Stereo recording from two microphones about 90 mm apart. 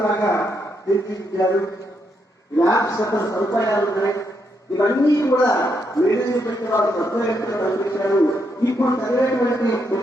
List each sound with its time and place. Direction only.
0.0 s a sound: 40° left (ahead or behind)
0.9 s a man's voice: 40° left (ahead or behind)
2.6 s a man's voice: 35° left (ahead or behind)